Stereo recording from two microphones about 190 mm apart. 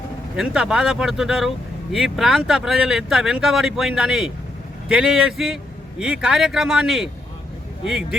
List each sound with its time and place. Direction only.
0.3 s speech: 5° right (ahead or behind)